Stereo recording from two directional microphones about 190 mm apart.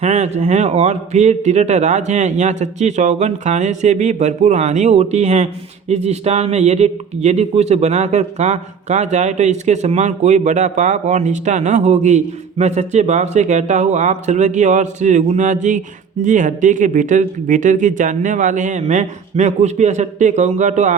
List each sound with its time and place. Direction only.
0.0 s speech: 35° right (ahead or behind)